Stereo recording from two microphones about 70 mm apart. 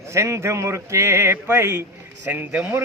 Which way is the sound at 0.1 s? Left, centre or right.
Right.